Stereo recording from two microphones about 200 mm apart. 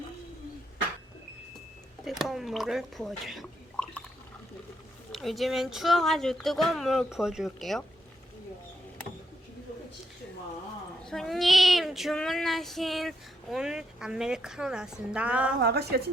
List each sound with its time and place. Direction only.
2.0 s speech: centre (ahead or behind)
5.1 s child singing: centre (ahead or behind)
11.0 s child singing: centre (ahead or behind)
15.6 s a woman's voice: 55° right (ahead or behind)